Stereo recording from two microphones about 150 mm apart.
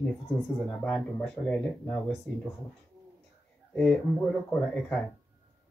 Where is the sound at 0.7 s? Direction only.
5° left (ahead or behind).